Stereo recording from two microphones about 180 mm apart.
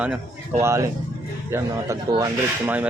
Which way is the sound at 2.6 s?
10° right (ahead or behind).